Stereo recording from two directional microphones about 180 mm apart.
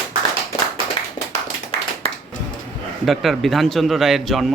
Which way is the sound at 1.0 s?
25° left (ahead or behind).